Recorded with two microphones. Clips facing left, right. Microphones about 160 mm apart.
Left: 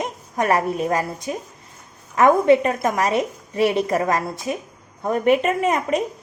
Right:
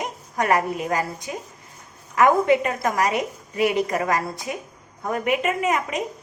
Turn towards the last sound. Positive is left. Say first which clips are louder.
# left 3 dB
turn(degrees=30)  # may be behind; listen again after turning